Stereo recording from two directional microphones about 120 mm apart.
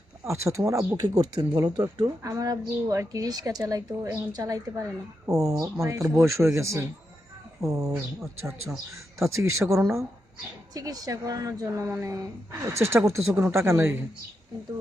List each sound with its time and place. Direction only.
0.3 s speech: 25° right (ahead or behind)